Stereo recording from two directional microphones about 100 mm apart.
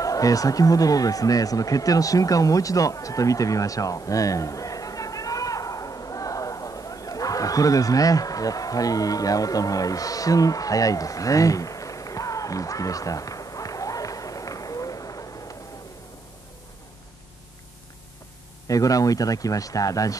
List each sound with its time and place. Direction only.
0.0 s speech: 35° left (ahead or behind)
18.7 s speech: 35° left (ahead or behind)